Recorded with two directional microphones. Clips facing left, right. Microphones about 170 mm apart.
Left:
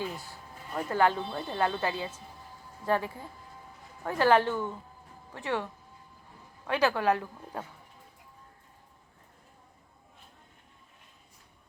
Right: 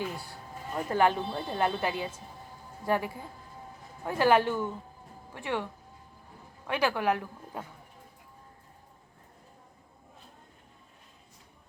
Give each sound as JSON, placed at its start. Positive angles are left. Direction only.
{"t": 0.9, "sound": "speech", "side_deg": -20}
{"t": 6.7, "sound": "speech", "side_deg": -15}